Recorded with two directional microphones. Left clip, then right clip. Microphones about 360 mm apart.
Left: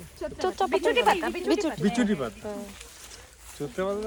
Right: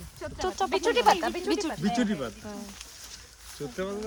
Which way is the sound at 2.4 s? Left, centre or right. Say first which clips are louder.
Left 6 dB; centre.